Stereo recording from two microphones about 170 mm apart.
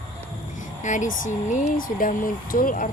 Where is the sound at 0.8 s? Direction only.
45° left (ahead or behind).